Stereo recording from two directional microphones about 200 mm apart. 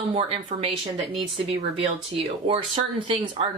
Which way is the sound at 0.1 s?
25° right (ahead or behind).